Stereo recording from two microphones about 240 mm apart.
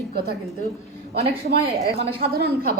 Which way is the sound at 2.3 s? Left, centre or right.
Right.